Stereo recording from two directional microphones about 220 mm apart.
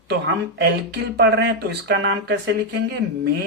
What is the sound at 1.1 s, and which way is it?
Speech, 45° right (ahead or behind).